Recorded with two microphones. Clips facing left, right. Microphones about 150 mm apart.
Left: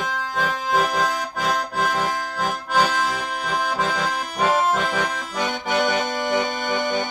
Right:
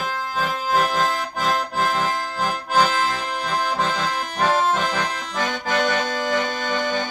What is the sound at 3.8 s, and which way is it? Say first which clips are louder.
Accordion: even; 5° left (ahead or behind).